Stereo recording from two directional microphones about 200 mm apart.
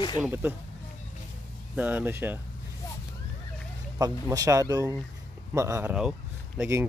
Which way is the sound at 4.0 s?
20° right (ahead or behind).